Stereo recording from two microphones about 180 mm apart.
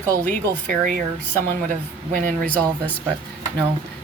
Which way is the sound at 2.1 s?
50° right (ahead or behind).